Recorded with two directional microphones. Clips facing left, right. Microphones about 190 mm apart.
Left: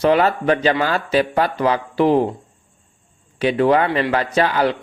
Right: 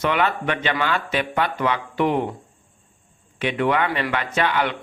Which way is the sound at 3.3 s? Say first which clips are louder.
Left 6 dB; 35° left (ahead or behind).